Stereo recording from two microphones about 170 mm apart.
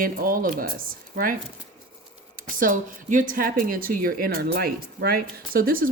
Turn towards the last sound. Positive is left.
turn(degrees=-55)  # may be behind; listen again after turning